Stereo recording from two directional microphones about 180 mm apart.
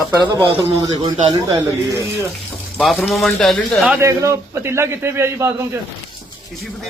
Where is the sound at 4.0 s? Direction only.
15° right (ahead or behind).